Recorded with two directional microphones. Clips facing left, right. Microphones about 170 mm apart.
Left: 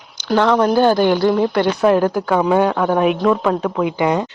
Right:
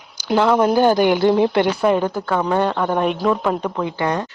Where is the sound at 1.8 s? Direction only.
Centre (ahead or behind).